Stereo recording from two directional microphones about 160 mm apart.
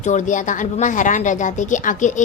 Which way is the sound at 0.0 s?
50° left (ahead or behind).